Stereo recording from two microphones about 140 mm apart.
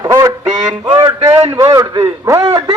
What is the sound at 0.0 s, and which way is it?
Quack, 25° right (ahead or behind).